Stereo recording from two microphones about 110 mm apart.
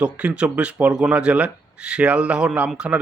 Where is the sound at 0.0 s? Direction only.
10° right (ahead or behind).